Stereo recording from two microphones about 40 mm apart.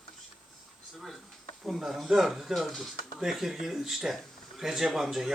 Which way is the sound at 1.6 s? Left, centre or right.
Centre.